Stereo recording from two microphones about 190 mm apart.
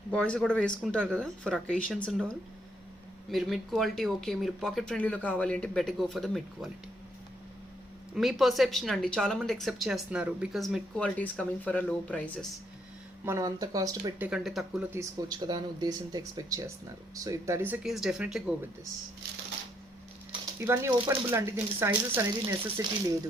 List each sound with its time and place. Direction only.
0.1 s speech: 5° left (ahead or behind)
8.1 s speech: centre (ahead or behind)
13.2 s speech: 15° right (ahead or behind)
14.3 s speech: centre (ahead or behind)
14.9 s speech: 20° right (ahead or behind); by 18.4 s centre (ahead or behind)
20.6 s speech: 15° right (ahead or behind)